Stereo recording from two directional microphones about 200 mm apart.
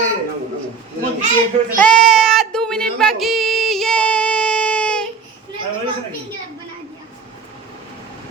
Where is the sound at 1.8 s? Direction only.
5° left (ahead or behind).